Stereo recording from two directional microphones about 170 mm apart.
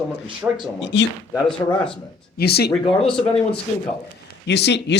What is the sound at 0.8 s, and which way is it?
Speech, 90° left.